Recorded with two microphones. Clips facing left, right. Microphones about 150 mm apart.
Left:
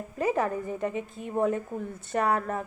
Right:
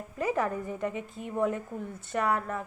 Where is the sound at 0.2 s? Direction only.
30° left (ahead or behind).